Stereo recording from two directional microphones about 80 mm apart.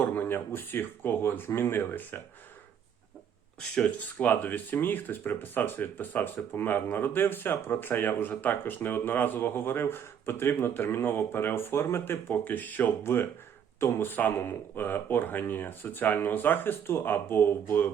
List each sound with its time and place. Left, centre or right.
0.0 s speech: left
3.8 s speech: left